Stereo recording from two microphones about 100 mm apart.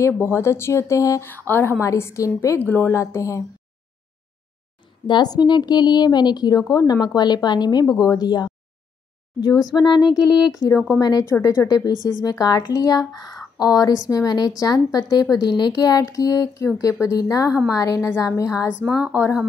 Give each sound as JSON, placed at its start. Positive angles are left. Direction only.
{"t": 0.0, "sound": "speech", "side_deg": 25}
{"t": 1.5, "sound": "speech", "side_deg": 20}
{"t": 5.0, "sound": "a woman's voice", "side_deg": 45}
{"t": 11.9, "sound": "speech", "side_deg": -40}
{"t": 12.2, "sound": "speech", "side_deg": 40}
{"t": 18.9, "sound": "a woman's voice", "side_deg": -10}